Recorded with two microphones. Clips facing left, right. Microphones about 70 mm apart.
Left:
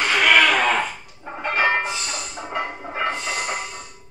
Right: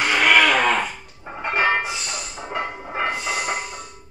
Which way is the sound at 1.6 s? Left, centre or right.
Centre.